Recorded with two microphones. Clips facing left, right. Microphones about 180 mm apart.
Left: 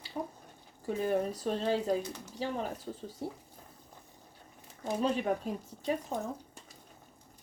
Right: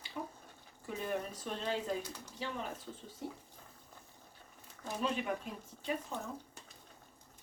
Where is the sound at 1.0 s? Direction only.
35° left (ahead or behind).